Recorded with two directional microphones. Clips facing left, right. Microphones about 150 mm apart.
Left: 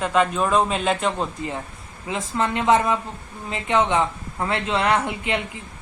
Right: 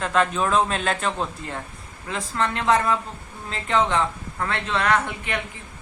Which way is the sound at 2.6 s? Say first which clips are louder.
Left 2 dB; 20° left (ahead or behind).